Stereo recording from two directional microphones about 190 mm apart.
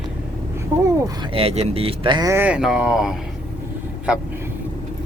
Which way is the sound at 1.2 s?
30° right (ahead or behind).